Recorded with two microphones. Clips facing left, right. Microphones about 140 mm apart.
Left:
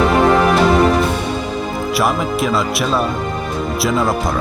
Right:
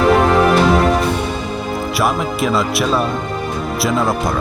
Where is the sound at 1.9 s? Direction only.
Centre (ahead or behind).